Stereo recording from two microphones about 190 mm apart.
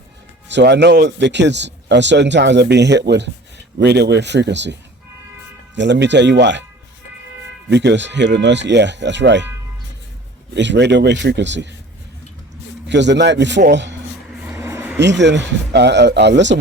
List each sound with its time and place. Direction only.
0.4 s speech: 65° right (ahead or behind)
7.7 s speech: 65° right (ahead or behind)
10.5 s speech: 70° right (ahead or behind)
12.9 s speech: 65° right (ahead or behind)
14.4 s vehicle: 15° right (ahead or behind)
14.9 s speech: 65° right (ahead or behind)